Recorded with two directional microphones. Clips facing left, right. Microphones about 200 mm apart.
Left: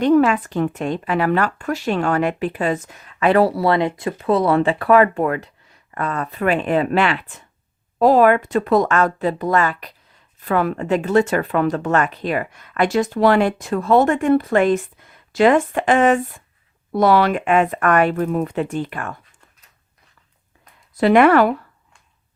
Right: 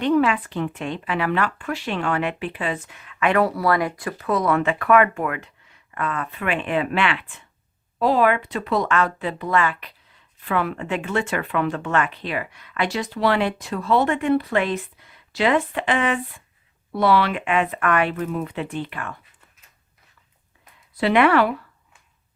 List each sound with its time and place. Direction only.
0.0 s speech: 45° left (ahead or behind)
20.9 s speech: 45° left (ahead or behind)